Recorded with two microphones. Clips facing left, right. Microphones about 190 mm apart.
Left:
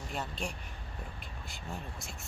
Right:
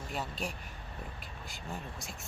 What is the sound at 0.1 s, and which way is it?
Speech, centre (ahead or behind).